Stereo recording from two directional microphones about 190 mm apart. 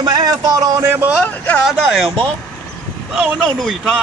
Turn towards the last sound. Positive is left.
turn(degrees=0)  # may be behind; listen again after turning